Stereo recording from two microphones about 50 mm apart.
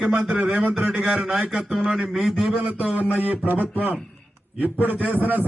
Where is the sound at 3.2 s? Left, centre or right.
Right.